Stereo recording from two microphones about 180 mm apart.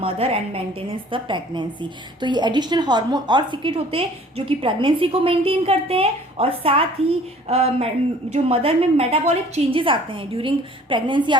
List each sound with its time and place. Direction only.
0.0 s a woman's voice: 30° right (ahead or behind)